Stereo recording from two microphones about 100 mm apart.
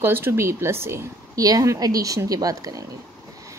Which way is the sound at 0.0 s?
25° right (ahead or behind).